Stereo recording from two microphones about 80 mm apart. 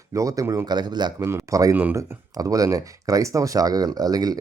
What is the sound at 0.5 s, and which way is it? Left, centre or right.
Speech, right.